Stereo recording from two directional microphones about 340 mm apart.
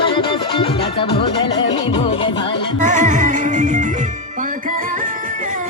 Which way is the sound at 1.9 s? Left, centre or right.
Centre.